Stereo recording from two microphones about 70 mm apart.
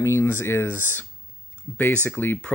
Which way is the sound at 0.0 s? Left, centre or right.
Left.